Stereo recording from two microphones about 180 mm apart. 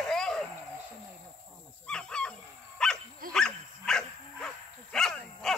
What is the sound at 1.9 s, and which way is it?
Wild animals, 5° left (ahead or behind).